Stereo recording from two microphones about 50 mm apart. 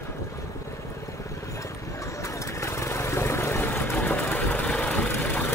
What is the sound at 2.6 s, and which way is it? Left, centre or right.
Vehicle, left.